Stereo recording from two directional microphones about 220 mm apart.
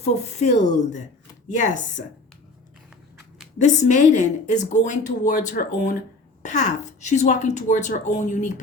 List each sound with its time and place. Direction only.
0.0 s a woman's voice: 30° left (ahead or behind)
3.6 s a woman's voice: 35° left (ahead or behind)